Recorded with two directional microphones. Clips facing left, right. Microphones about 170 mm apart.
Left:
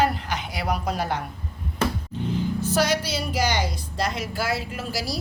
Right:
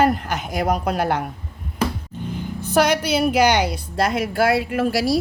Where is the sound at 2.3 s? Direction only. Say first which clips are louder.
Right 4 dB; 60° right (ahead or behind).